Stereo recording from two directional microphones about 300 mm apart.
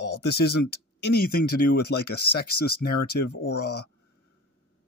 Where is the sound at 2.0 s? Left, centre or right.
Left.